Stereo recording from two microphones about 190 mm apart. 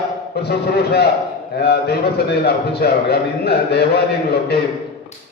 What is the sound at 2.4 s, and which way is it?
A man's voice, 55° left (ahead or behind).